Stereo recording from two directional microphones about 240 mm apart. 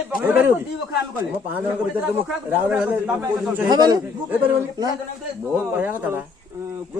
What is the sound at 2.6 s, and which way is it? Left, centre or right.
Speech, centre.